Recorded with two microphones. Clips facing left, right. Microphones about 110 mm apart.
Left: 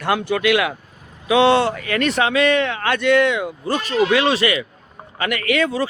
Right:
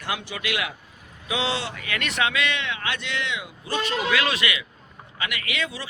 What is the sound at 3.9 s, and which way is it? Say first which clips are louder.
Speech: left 9 dB; 30° left (ahead or behind).